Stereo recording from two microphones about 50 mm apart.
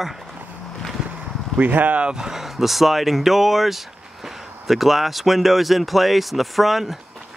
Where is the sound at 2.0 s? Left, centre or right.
Centre.